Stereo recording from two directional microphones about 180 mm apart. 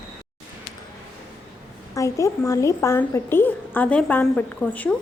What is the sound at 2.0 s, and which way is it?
A woman's voice, 15° left (ahead or behind).